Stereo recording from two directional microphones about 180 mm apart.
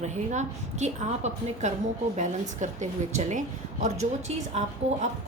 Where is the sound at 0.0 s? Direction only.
40° right (ahead or behind).